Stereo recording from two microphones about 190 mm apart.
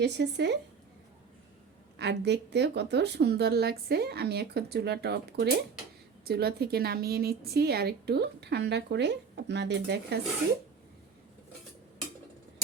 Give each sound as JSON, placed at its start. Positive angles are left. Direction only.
{"t": 0.0, "sound": "a woman's voice", "side_deg": -65}
{"t": 2.0, "sound": "a woman's voice", "side_deg": -60}